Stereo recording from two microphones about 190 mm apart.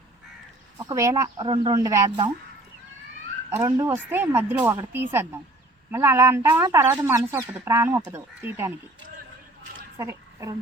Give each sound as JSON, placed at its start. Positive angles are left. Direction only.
{"t": 0.8, "sound": "speech", "side_deg": -20}
{"t": 3.6, "sound": "speech", "side_deg": -15}
{"t": 10.0, "sound": "speech", "side_deg": -15}